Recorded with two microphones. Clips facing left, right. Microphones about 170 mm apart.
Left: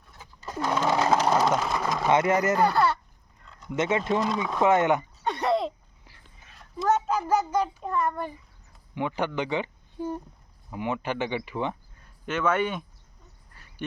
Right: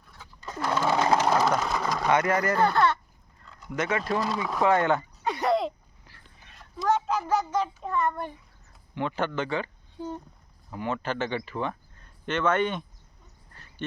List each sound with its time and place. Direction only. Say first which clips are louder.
0.2 s sewing machine: left 2 dB; 10° left (ahead or behind)
2.0 s speech: left 2 dB; 25° left (ahead or behind)
2.6 s speech: even; 10° left (ahead or behind)
3.4 s a sound: even; centre (ahead or behind)
3.7 s speech: left 3 dB; 25° left (ahead or behind)
5.2 s a sound: even; centre (ahead or behind)
6.4 s a child's voice: left 1 dB; centre (ahead or behind)
9.0 s speech: left 1 dB; 15° left (ahead or behind)
13.5 s a sound: right 3 dB; 10° left (ahead or behind)